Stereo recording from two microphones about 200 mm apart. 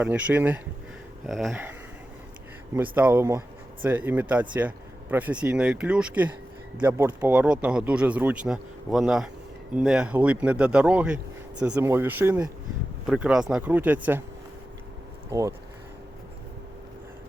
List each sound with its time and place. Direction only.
0.0 s speech: 10° right (ahead or behind)
2.7 s speech: 10° right (ahead or behind)
15.3 s speech: 15° right (ahead or behind)